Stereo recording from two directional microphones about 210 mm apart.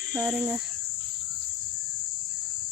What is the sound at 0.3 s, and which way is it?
Cricket, 5° right (ahead or behind).